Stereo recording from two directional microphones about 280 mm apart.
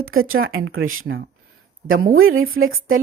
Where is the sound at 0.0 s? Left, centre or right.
Right.